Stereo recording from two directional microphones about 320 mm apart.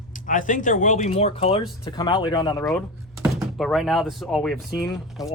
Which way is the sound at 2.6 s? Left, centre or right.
Centre.